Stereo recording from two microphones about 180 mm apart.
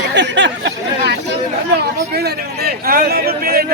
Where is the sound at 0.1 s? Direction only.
75° right (ahead or behind).